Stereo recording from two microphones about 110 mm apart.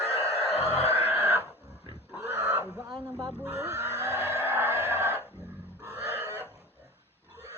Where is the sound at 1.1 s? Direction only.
20° right (ahead or behind).